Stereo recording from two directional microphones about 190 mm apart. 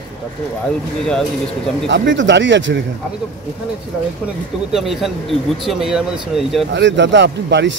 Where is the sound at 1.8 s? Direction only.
70° right (ahead or behind).